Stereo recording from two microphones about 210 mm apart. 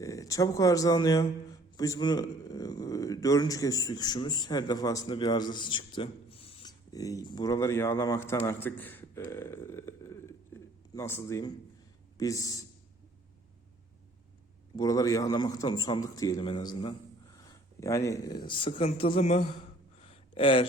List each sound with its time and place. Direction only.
0.0 s speech: 15° left (ahead or behind)
14.8 s a man's voice: 15° left (ahead or behind)
20.0 s a sound: 25° left (ahead or behind)